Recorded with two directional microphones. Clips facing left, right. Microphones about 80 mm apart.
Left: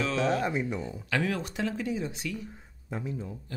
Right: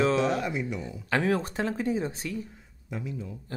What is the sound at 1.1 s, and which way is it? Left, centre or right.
Speech, right.